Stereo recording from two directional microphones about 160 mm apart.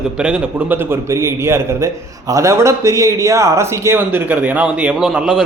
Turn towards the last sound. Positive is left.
turn(degrees=-5)  # may be behind; listen again after turning